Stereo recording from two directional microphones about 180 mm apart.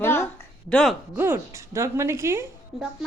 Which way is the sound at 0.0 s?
15° left (ahead or behind).